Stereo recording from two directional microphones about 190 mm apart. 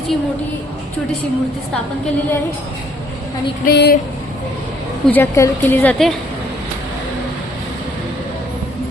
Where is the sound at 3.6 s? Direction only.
55° left (ahead or behind).